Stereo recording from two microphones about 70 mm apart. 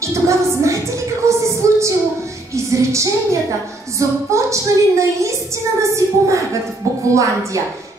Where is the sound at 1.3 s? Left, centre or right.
Right.